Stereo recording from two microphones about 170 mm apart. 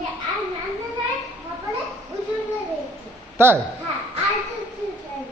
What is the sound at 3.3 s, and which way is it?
Speech, 15° right (ahead or behind).